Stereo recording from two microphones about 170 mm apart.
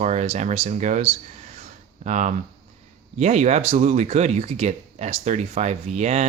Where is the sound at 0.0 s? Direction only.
45° right (ahead or behind).